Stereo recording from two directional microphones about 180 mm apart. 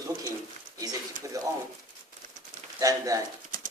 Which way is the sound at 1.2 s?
50° right (ahead or behind).